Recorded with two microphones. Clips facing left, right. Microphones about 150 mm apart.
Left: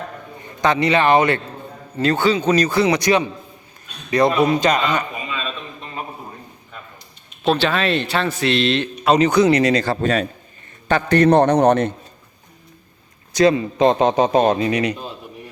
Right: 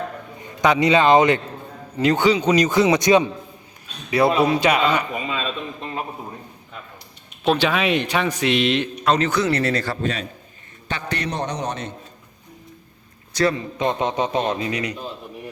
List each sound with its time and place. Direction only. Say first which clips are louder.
0.6 s speech: right 1 dB; 15° right (ahead or behind)
4.1 s speech: left 1 dB; 5° right (ahead or behind)
7.4 s speech: left 1 dB; 10° right (ahead or behind)
9.0 s speech: left 6 dB; 15° left (ahead or behind)
9.8 s a man's voice: left 6 dB; 50° left (ahead or behind)
13.3 s a man's voice: left 6 dB; 20° left (ahead or behind)
14.0 s speech: left 7 dB; 70° left (ahead or behind)